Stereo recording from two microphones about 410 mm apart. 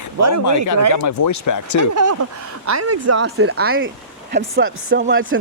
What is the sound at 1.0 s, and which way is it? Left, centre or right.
Speech, left.